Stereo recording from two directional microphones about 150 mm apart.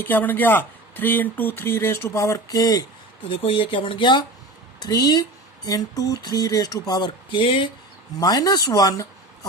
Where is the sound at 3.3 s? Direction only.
35° left (ahead or behind).